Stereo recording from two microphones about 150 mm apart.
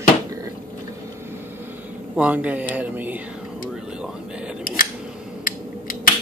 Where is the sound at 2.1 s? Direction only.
10° right (ahead or behind).